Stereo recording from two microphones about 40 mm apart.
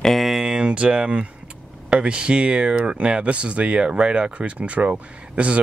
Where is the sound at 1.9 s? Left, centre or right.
Right.